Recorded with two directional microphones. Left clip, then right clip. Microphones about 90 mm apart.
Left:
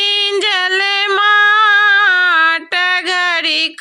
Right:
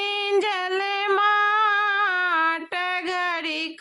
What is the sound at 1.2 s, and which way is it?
Music, 15° left (ahead or behind).